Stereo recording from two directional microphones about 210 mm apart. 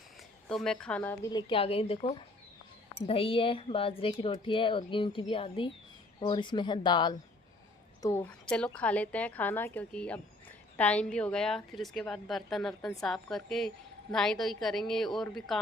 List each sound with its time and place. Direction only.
0.4 s a woman's voice: centre (ahead or behind); by 7.2 s 20° left (ahead or behind)
8.0 s a woman's voice: 10° left (ahead or behind)